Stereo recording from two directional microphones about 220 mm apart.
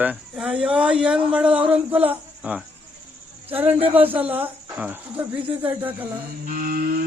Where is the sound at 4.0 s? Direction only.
5° right (ahead or behind).